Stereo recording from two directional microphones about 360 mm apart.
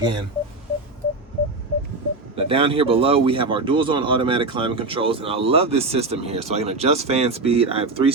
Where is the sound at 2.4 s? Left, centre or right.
Centre.